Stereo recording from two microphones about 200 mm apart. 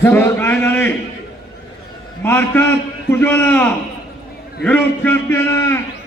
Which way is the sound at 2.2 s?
10° left (ahead or behind).